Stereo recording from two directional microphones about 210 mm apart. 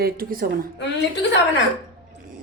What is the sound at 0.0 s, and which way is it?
Speech, 45° right (ahead or behind).